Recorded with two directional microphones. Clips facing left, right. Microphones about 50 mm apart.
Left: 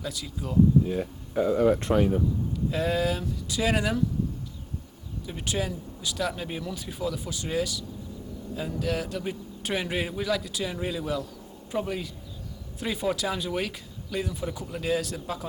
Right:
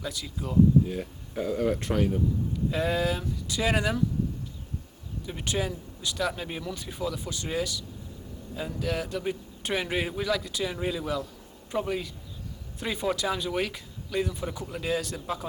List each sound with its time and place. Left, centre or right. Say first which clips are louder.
0.0 s a man's voice: even; centre
0.9 s speech: left 4 dB; centre
2.6 s a man's voice: left 1 dB; centre
5.2 s a man's voice: even; centre